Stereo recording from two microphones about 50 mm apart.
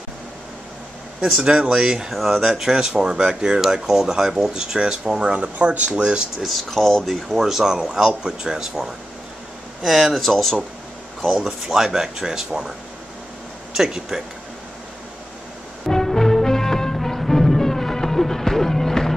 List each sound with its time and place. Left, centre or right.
1.2 s speech: centre
6.4 s speech: centre
7.4 s speech: centre
9.8 s speech: centre
11.4 s speech: centre
13.7 s speech: centre
15.9 s music: centre